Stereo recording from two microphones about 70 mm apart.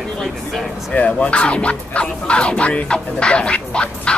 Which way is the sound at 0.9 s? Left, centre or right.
Centre.